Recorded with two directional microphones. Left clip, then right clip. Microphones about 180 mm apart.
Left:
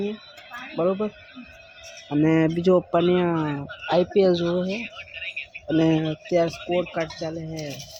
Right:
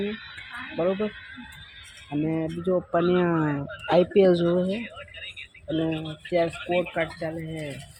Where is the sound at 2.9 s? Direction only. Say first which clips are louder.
Left 2 dB; 5° left (ahead or behind).